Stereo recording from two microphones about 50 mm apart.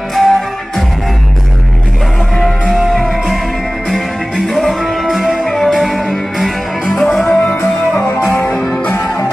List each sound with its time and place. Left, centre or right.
0.1 s music: centre
2.7 s music: centre
4.6 s music: centre
7.2 s music: left